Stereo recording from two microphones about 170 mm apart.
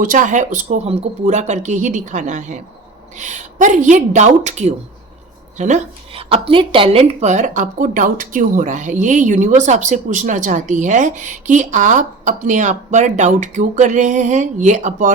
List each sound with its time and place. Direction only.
0.0 s speech: 50° right (ahead or behind)